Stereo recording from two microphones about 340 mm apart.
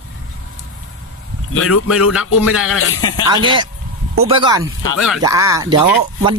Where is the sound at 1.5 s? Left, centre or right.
Left.